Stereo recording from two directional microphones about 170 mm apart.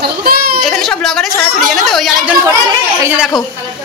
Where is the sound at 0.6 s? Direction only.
Centre (ahead or behind).